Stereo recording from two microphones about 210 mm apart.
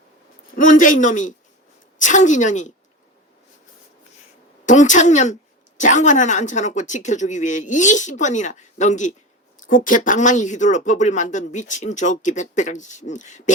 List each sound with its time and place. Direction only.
0.5 s a woman's voice: 40° left (ahead or behind)
4.6 s a woman's voice: 35° left (ahead or behind)